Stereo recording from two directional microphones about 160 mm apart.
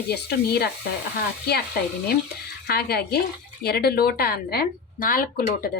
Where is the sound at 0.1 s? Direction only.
90° left.